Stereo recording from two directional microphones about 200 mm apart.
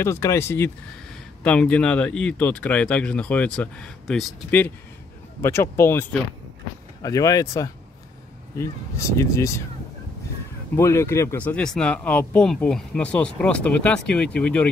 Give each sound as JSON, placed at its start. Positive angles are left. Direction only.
{"t": 0.0, "sound": "speech", "side_deg": 15}
{"t": 10.8, "sound": "speech", "side_deg": 15}